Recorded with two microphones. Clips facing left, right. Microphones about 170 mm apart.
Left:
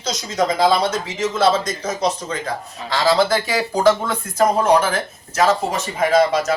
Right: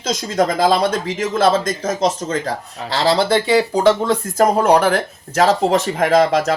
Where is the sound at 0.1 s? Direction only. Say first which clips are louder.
Right 3 dB; 50° right (ahead or behind).